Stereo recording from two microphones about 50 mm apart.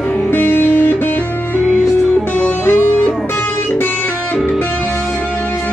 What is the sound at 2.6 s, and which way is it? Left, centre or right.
Music, left.